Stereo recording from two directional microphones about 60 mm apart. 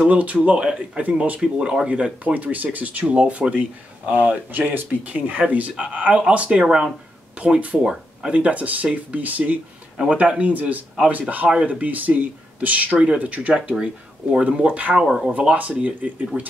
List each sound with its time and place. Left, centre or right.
0.1 s speech: right
1.0 s speech: right
1.4 s speech: centre
7.8 s speech: centre
8.4 s speech: right
15.0 s speech: centre
15.3 s speech: right